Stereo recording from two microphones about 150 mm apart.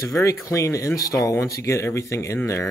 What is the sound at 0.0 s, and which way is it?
Speech, 20° left (ahead or behind).